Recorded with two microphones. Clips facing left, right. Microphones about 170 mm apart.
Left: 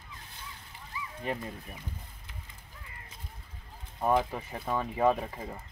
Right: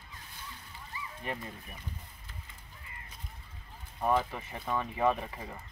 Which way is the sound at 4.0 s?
15° left (ahead or behind).